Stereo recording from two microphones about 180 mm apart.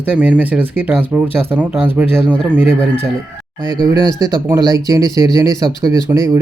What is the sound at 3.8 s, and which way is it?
Speech, 20° right (ahead or behind).